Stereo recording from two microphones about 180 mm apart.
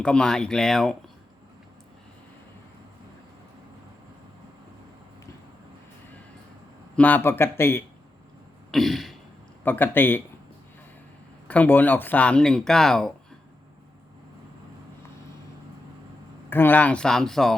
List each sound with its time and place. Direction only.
0.0 s speech: 5° left (ahead or behind)
6.9 s speech: 10° left (ahead or behind)
8.7 s throat clearing: centre (ahead or behind)
9.6 s speech: 10° left (ahead or behind)
11.4 s speech: 10° left (ahead or behind)
16.5 s speech: 10° left (ahead or behind)